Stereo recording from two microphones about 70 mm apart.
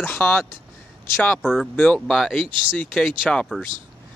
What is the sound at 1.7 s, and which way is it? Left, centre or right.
Speech, left.